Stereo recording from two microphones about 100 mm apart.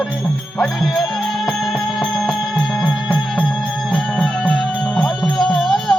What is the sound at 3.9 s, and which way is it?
Music, 5° left (ahead or behind).